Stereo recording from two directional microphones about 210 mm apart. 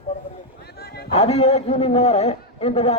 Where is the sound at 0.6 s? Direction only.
50° left (ahead or behind).